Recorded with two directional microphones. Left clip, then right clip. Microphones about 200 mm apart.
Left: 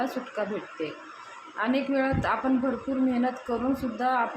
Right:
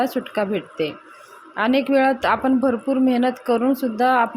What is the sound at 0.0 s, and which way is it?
A woman's voice, 40° right (ahead or behind).